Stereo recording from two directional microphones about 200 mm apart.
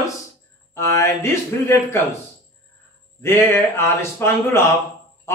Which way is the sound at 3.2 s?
10° left (ahead or behind).